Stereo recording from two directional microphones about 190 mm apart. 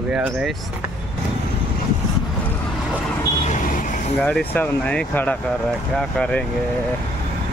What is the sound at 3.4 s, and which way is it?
Vehicle, 45° left (ahead or behind).